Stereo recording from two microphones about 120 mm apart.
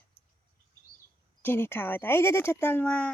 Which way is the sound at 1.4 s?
20° left (ahead or behind).